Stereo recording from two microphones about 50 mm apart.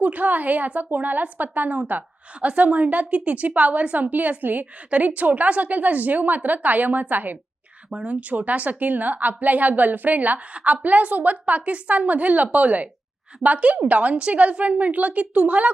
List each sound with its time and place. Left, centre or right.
0.0 s a woman's voice: right
7.9 s a woman's voice: right